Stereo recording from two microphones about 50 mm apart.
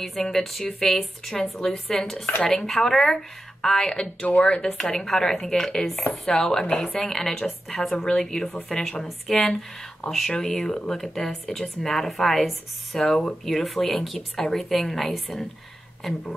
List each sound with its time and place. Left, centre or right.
0.0 s speech: centre
6.7 s speech: left
7.0 s speech: centre